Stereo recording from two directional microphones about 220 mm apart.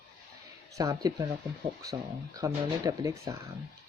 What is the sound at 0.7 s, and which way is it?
Speech, 15° right (ahead or behind).